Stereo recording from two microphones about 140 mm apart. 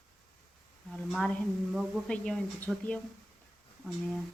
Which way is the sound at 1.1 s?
5° left (ahead or behind).